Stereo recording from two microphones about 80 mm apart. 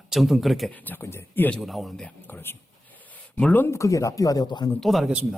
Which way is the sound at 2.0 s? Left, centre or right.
Left.